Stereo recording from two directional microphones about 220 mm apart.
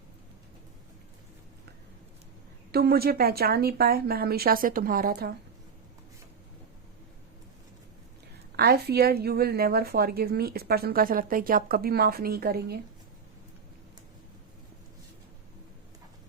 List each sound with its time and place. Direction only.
2.7 s a woman's voice: 45° right (ahead or behind)
8.5 s a woman's voice: 45° right (ahead or behind)